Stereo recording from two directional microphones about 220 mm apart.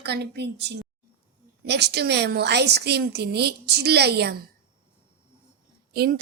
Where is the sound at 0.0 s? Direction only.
50° right (ahead or behind).